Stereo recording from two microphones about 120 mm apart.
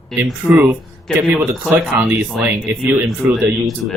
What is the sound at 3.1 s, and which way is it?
Speech, centre (ahead or behind).